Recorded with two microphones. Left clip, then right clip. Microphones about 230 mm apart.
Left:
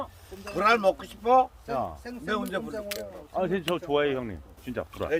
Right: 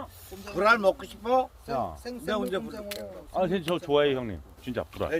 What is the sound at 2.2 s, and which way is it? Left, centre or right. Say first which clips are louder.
Speech: even; left.